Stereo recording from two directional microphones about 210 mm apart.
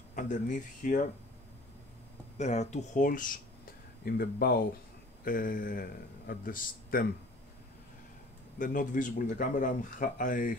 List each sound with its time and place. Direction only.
0.1 s speech: 40° left (ahead or behind)
2.3 s a man's voice: 35° left (ahead or behind)
8.5 s speech: 40° left (ahead or behind)